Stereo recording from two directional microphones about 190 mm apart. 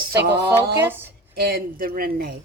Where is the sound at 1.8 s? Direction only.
50° right (ahead or behind).